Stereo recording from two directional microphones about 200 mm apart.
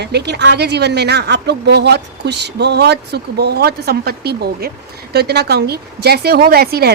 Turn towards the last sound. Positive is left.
turn(degrees=-50)  # may be behind; listen again after turning